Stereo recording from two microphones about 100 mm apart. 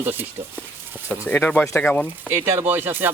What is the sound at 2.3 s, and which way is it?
Speech, 25° right (ahead or behind).